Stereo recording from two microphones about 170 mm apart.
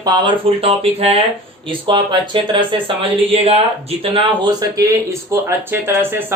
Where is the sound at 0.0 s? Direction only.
25° right (ahead or behind).